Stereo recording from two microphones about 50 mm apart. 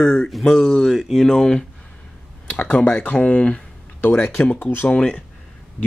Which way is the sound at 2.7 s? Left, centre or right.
Left.